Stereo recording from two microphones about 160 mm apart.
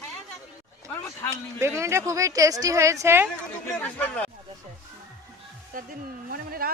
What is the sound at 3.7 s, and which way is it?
Speech, 5° left (ahead or behind).